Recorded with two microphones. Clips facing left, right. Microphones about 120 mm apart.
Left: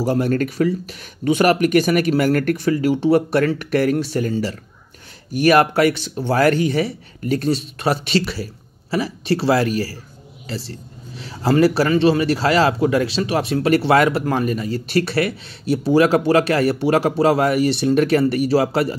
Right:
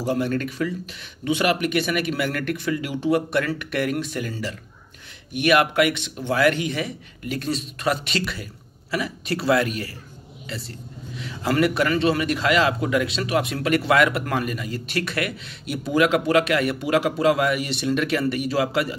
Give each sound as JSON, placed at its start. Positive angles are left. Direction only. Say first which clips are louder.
{"t": 0.0, "sound": "a man's voice", "louder": "left 5 dB", "side_deg": 40}